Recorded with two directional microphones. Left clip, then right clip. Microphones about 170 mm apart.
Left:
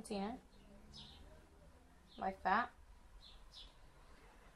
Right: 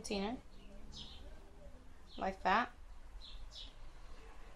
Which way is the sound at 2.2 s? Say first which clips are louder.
Right 3 dB; 25° right (ahead or behind).